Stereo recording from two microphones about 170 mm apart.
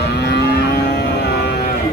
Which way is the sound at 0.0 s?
80° left.